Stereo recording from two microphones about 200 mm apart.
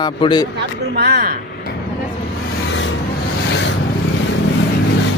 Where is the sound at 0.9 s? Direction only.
55° right (ahead or behind).